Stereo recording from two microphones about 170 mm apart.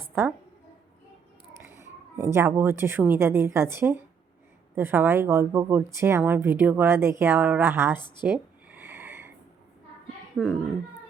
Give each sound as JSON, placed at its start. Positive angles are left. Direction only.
{"t": 0.1, "sound": "speech", "side_deg": -15}
{"t": 1.6, "sound": "a woman's voice", "side_deg": -15}
{"t": 7.9, "sound": "a woman's voice", "side_deg": 25}
{"t": 8.7, "sound": "a sound", "side_deg": -10}
{"t": 10.4, "sound": "speech", "side_deg": 5}